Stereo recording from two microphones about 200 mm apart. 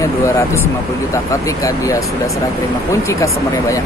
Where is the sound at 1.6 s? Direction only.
15° left (ahead or behind).